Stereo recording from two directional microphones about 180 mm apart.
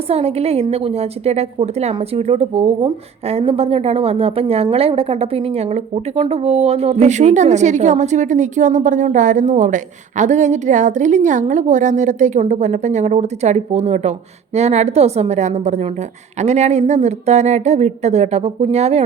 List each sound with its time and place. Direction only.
0.1 s a woman's voice: 35° right (ahead or behind)